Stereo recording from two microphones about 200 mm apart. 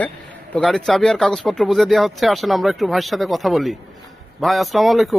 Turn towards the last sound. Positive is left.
turn(degrees=0)  # may be behind; listen again after turning